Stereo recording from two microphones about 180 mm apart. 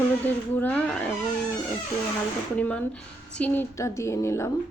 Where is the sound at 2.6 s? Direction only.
10° left (ahead or behind).